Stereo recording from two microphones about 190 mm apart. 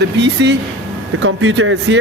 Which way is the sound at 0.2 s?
70° right (ahead or behind).